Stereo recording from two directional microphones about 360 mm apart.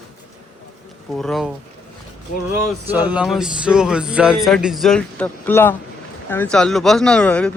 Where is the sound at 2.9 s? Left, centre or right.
Centre.